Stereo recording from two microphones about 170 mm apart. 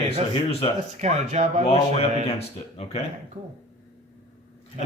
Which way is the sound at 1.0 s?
40° right (ahead or behind).